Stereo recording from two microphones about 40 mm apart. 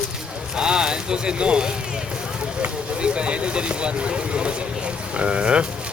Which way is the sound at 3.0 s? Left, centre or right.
Right.